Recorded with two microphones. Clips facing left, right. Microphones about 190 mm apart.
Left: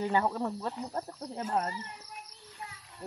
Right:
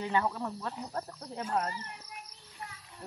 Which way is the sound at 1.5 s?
20° left (ahead or behind).